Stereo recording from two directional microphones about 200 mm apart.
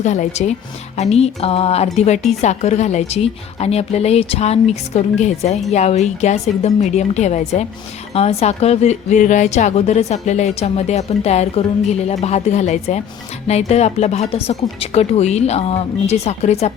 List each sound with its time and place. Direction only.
0.0 s a woman's voice: 35° left (ahead or behind)